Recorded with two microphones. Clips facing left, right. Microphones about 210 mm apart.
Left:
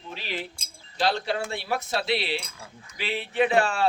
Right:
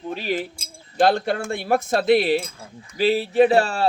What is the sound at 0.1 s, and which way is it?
Speech, 50° right (ahead or behind).